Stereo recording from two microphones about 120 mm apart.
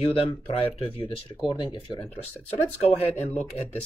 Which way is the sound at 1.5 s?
35° left (ahead or behind).